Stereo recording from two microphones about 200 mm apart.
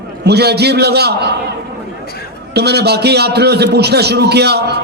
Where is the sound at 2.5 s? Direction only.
55° right (ahead or behind).